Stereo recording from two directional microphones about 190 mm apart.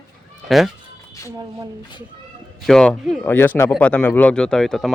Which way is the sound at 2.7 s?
Centre (ahead or behind).